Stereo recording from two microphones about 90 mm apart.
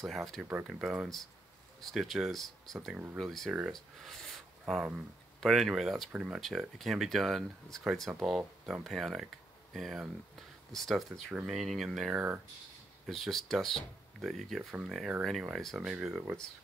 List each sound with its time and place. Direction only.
0.0 s speech: centre (ahead or behind)
0.4 s speech: 15° right (ahead or behind)
0.7 s speech: 5° right (ahead or behind)
2.9 s speech: 15° right (ahead or behind)
3.2 s speech: centre (ahead or behind)